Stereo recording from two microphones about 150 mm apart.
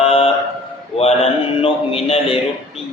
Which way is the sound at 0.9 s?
40° left (ahead or behind).